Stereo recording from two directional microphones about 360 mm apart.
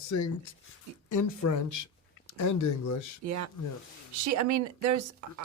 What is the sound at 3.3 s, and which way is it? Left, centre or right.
Speech, right.